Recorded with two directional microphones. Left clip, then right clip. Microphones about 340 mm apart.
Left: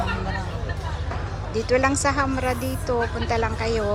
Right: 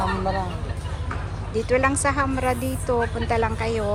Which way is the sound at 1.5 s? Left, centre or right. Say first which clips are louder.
Even; centre.